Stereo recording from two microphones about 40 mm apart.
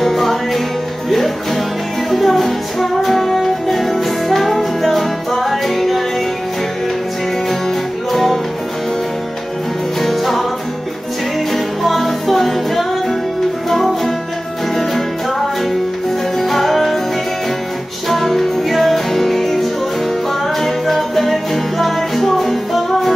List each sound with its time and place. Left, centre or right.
0.0 s music: centre
8.1 s music: centre
10.0 s music: centre
11.5 s music: centre
16.3 s music: centre
18.0 s music: centre